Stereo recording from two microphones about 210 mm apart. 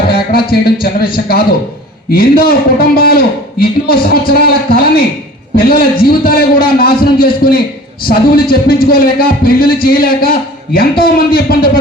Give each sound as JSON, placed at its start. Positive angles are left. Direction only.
{"t": 0.1, "sound": "speech", "side_deg": 45}
{"t": 2.1, "sound": "a man's voice", "side_deg": 45}